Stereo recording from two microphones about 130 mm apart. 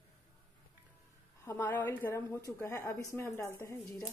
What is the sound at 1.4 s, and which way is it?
A woman's voice, 15° left (ahead or behind).